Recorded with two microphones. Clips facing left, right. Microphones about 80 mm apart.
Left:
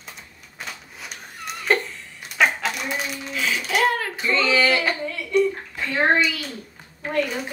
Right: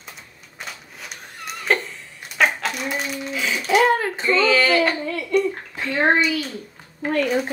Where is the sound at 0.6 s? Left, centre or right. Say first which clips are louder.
Even; centre.